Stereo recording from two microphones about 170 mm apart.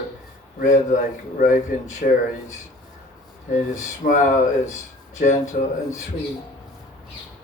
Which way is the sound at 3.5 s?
45° left (ahead or behind).